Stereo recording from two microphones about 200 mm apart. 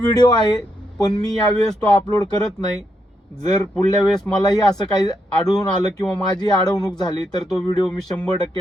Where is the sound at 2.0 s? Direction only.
20° left (ahead or behind).